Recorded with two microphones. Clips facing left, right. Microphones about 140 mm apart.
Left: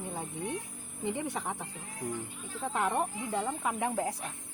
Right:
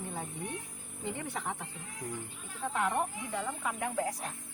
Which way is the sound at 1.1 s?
15° left (ahead or behind).